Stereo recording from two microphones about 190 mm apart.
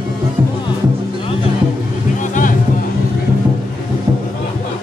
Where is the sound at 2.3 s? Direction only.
45° left (ahead or behind).